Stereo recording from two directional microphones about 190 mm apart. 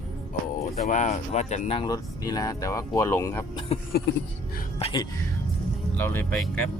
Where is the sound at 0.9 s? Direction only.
40° left (ahead or behind); by 3.6 s 15° left (ahead or behind).